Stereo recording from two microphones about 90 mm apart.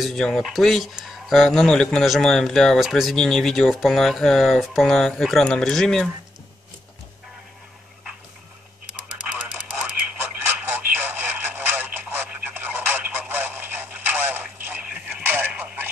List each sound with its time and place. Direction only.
0.0 s speech: 5° left (ahead or behind)
9.6 s radio: 10° right (ahead or behind)
10.4 s radio: 20° right (ahead or behind)